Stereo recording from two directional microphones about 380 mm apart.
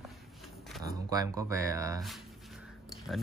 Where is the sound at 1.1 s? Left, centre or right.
Centre.